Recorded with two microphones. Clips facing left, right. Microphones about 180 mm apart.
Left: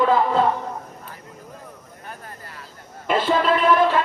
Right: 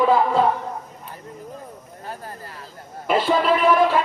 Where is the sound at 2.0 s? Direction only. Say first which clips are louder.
Right 4 dB; 30° right (ahead or behind).